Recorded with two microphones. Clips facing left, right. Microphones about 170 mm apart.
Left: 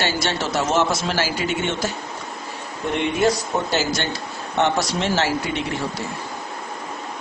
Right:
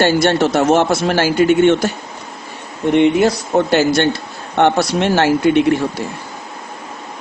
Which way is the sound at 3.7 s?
60° right (ahead or behind).